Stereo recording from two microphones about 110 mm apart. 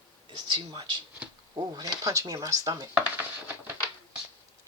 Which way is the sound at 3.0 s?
15° right (ahead or behind).